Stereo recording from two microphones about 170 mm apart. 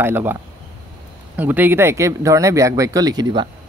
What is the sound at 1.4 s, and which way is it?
Speech, 10° right (ahead or behind).